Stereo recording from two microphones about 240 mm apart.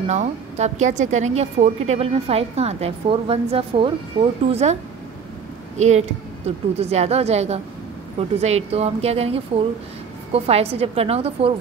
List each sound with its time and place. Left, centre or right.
0.1 s a woman's voice: right
5.8 s a woman's voice: right